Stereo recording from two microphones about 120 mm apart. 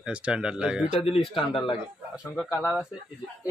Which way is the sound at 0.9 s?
55° left (ahead or behind).